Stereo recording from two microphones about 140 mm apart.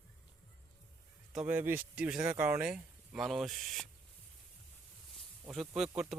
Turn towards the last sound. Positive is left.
turn(degrees=-5)  # may be behind; listen again after turning